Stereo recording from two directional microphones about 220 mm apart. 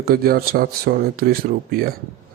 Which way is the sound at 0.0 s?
45° right (ahead or behind).